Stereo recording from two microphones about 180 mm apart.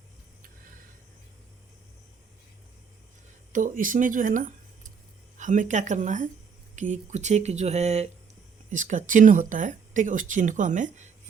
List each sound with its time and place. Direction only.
3.5 s speech: 45° right (ahead or behind)